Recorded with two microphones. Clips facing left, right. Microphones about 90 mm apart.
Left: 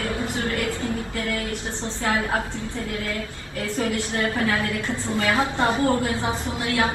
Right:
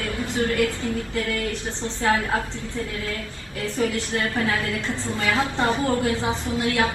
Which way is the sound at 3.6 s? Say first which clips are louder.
Right 1 dB; 20° left (ahead or behind).